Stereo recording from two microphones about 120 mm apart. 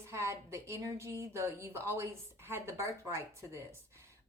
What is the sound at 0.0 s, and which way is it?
A woman's voice, 20° right (ahead or behind).